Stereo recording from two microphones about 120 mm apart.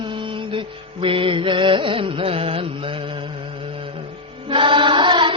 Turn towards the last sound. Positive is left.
turn(degrees=-40)  # may be behind; listen again after turning